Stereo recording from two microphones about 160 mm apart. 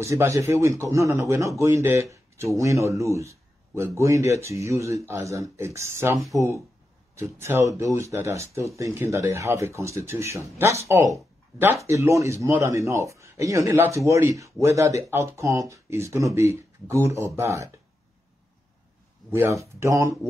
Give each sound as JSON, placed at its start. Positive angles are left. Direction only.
{"t": 0.0, "sound": "speech", "side_deg": -20}
{"t": 19.3, "sound": "speech", "side_deg": -15}